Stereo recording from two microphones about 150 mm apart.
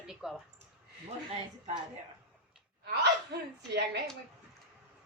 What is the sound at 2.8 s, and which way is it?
Speech, 90° right.